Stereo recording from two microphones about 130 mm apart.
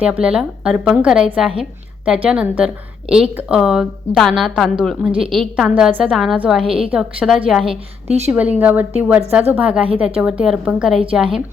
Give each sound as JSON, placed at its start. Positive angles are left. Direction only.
{"t": 0.0, "sound": "a woman's voice", "side_deg": -10}
{"t": 8.0, "sound": "speech", "side_deg": -55}
{"t": 8.3, "sound": "a woman's voice", "side_deg": -10}